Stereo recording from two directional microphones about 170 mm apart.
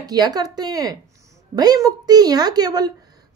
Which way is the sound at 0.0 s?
25° right (ahead or behind).